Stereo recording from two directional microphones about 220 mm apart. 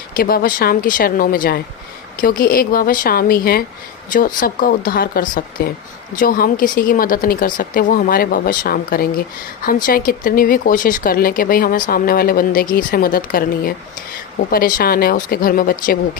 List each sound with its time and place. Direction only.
0.2 s speech: 40° left (ahead or behind)